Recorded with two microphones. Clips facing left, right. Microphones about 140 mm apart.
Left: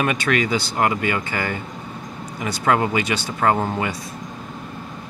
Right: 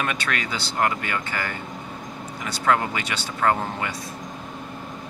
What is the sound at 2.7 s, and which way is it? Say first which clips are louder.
Speech: left 3 dB; 15° left (ahead or behind).